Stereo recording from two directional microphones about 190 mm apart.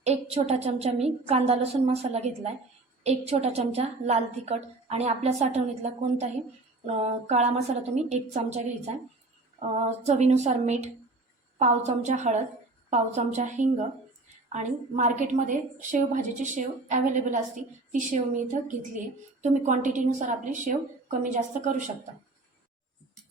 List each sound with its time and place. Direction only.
0.0 s a woman's voice: 35° right (ahead or behind)